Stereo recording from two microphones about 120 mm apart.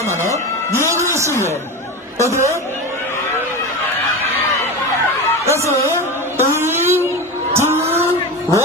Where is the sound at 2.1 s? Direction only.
25° right (ahead or behind).